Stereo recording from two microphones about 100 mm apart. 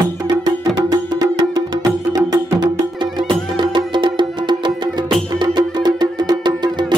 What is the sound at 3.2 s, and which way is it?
Music, 50° right (ahead or behind).